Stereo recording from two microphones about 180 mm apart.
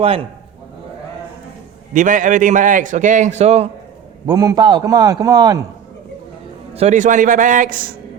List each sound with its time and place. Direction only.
0.0 s a man's voice: 30° right (ahead or behind)
1.9 s a man's voice: 45° right (ahead or behind)
4.3 s a man's voice: 20° right (ahead or behind)
6.7 s a man's voice: 40° right (ahead or behind)